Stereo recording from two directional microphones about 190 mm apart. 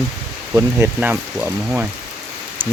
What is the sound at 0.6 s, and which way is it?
Speech, 10° right (ahead or behind).